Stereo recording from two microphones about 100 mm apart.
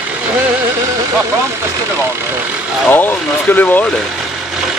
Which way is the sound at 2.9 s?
20° left (ahead or behind).